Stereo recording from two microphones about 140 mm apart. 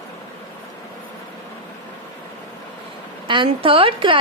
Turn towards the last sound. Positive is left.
turn(degrees=-40)  # may be behind; listen again after turning